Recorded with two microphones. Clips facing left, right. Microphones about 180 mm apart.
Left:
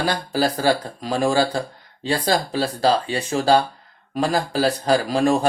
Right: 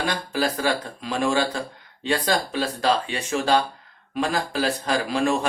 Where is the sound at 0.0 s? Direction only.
35° left (ahead or behind).